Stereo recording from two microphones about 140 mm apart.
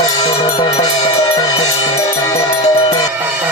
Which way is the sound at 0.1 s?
30° left (ahead or behind).